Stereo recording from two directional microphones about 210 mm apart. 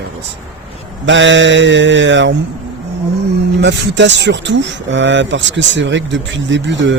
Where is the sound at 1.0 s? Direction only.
60° right (ahead or behind).